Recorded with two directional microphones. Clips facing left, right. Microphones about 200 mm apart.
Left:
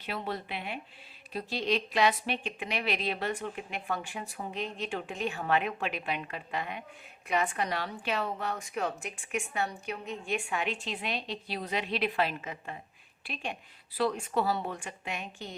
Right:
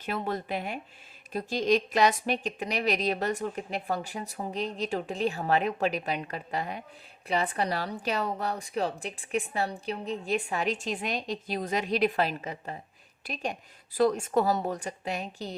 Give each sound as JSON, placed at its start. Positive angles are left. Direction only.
{"t": 0.0, "sound": "speech", "side_deg": -45}